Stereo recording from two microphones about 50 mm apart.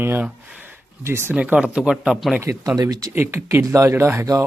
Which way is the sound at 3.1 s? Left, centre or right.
Right.